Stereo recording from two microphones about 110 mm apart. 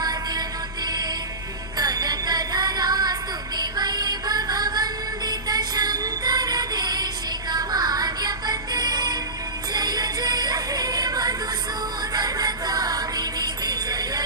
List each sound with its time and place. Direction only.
0.0 s music: 35° right (ahead or behind)
1.8 s music: 35° right (ahead or behind)